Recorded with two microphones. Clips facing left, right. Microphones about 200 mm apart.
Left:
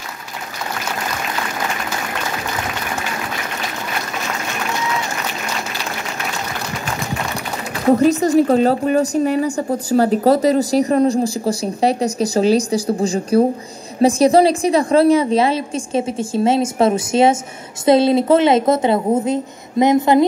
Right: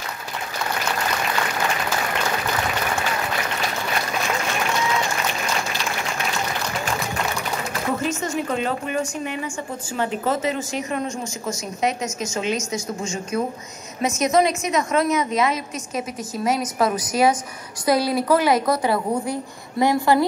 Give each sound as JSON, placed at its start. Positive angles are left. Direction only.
{"t": 7.9, "sound": "a woman's voice", "side_deg": 35}